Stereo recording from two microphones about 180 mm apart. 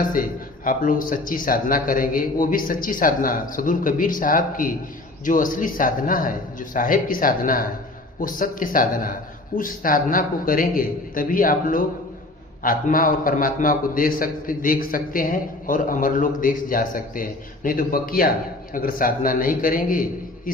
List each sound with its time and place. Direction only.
0.0 s a man's voice: 50° left (ahead or behind)